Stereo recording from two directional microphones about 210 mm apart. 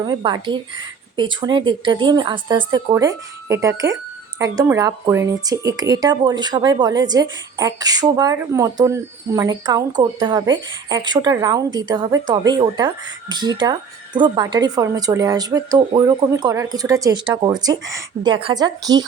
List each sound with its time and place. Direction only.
0.0 s a woman's voice: 20° right (ahead or behind)